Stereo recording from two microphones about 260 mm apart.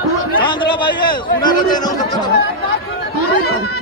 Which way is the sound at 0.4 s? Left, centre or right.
Centre.